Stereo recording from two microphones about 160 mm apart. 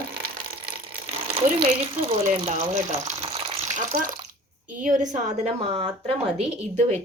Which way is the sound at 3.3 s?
35° right (ahead or behind).